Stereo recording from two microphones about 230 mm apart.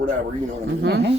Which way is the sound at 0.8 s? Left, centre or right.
Right.